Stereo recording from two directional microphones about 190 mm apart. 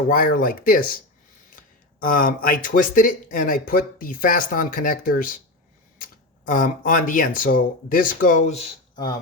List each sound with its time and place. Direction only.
0.1 s speech: 50° left (ahead or behind)
2.0 s speech: 45° left (ahead or behind)